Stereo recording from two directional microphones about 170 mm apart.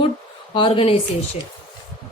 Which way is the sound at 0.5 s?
35° left (ahead or behind).